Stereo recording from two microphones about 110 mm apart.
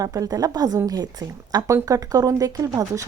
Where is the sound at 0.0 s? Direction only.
35° right (ahead or behind).